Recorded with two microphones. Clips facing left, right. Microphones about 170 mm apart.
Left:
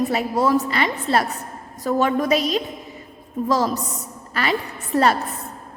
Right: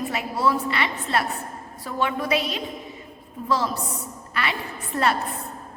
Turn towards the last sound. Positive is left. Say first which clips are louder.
# left 5 dB
turn(degrees=40)  # may be behind; listen again after turning